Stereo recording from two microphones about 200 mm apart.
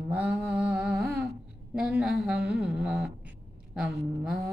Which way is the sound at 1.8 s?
5° right (ahead or behind).